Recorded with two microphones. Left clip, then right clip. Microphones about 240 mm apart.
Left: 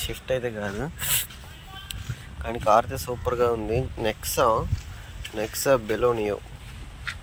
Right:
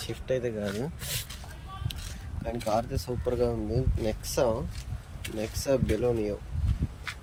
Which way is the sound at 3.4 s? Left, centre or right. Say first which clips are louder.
Left 6 dB; centre.